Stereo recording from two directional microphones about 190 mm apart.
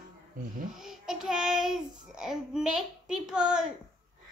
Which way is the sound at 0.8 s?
5° right (ahead or behind).